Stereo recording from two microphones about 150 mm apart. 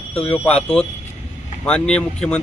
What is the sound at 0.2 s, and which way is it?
Speech, 10° left (ahead or behind).